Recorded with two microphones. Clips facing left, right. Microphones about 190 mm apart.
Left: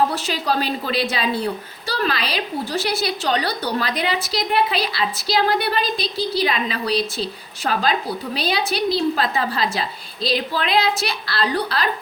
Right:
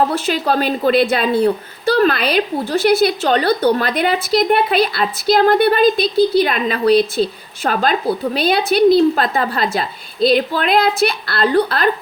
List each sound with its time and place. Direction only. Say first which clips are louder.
0.1 s a woman's voice: right 5 dB; 55° right (ahead or behind)